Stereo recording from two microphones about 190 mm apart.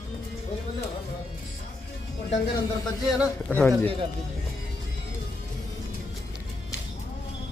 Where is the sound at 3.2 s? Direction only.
5° left (ahead or behind).